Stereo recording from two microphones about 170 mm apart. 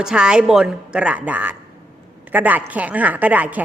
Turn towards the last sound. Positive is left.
turn(degrees=-10)  # may be behind; listen again after turning